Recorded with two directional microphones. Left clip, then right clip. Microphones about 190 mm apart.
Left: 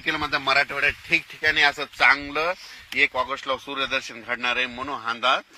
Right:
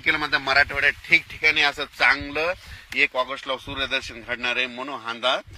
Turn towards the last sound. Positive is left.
turn(degrees=25)  # may be behind; listen again after turning